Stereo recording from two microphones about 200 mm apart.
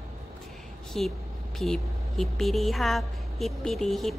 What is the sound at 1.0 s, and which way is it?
A woman's voice, centre (ahead or behind).